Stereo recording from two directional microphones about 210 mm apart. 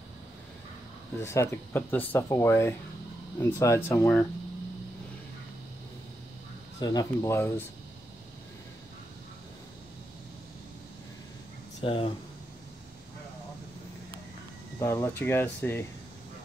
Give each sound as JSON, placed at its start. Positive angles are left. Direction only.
{"t": 1.2, "sound": "speech", "side_deg": 15}
{"t": 6.8, "sound": "speech", "side_deg": 15}
{"t": 11.8, "sound": "speech", "side_deg": 25}
{"t": 14.8, "sound": "speech", "side_deg": 10}